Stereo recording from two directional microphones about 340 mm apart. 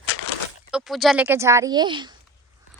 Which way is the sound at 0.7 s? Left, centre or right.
Centre.